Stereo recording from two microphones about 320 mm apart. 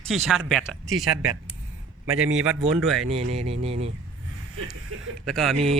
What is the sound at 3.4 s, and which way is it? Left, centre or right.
Speech, centre.